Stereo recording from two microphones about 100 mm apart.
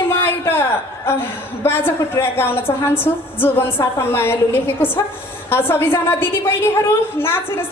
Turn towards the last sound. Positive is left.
turn(degrees=25)  # may be behind; listen again after turning